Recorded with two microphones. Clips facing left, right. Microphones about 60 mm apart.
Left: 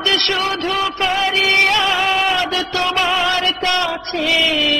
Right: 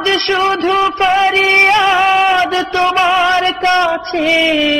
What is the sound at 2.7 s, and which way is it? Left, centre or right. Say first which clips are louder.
Music: right 6 dB; right.